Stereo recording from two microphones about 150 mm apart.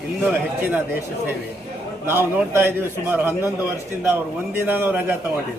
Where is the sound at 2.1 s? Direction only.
15° right (ahead or behind).